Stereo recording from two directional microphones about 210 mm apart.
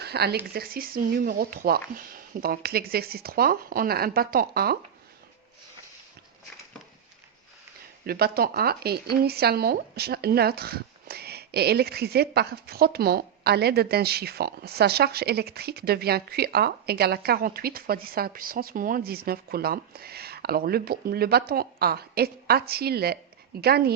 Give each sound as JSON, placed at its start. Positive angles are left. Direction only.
{"t": 0.0, "sound": "speech", "side_deg": -50}
{"t": 8.0, "sound": "speech", "side_deg": -45}